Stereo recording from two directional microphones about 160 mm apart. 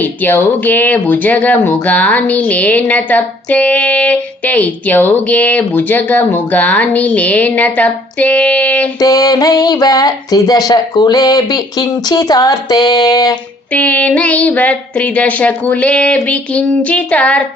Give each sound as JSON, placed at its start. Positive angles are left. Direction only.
{"t": 0.0, "sound": "speech", "side_deg": 10}
{"t": 9.0, "sound": "a sound", "side_deg": 20}
{"t": 13.7, "sound": "speech", "side_deg": 10}